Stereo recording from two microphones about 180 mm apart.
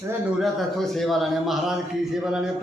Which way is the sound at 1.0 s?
Centre (ahead or behind).